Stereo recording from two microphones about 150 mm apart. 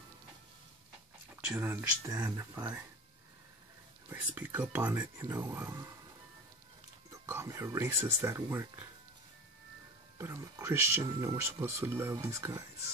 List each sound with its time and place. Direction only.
1.5 s speech: 15° right (ahead or behind)
4.1 s speech: 15° right (ahead or behind)
7.1 s speech: 20° right (ahead or behind)
10.1 s speech: 20° right (ahead or behind)